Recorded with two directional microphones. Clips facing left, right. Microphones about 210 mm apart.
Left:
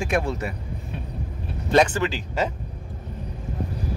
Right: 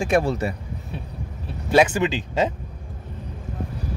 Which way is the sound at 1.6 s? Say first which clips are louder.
Right 2 dB; 10° right (ahead or behind).